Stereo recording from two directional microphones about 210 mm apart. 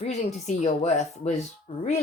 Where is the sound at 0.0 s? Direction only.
30° left (ahead or behind).